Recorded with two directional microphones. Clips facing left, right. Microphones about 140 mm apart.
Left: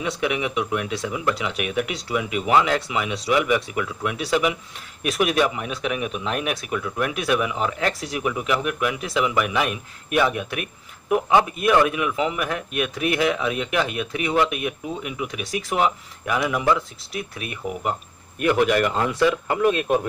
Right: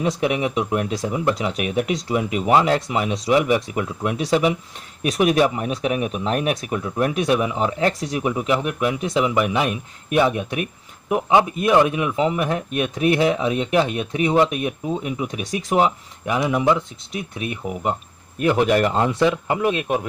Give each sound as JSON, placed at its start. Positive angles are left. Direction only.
{"t": 0.2, "sound": "speech", "side_deg": -35}